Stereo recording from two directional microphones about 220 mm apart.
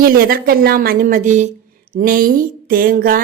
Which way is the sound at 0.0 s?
45° right (ahead or behind).